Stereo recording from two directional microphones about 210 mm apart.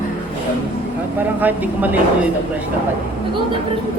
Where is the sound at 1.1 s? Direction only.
10° right (ahead or behind).